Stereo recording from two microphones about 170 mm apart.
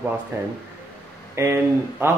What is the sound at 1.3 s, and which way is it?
Speech, 15° right (ahead or behind).